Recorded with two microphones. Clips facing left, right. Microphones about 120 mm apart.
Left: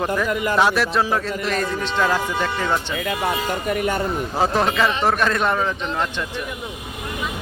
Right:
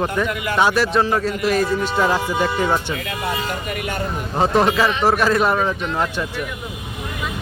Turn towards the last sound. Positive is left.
turn(degrees=-10)  # may be behind; listen again after turning